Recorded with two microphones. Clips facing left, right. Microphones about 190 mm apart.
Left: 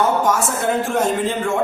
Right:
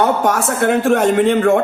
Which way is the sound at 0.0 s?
65° right (ahead or behind).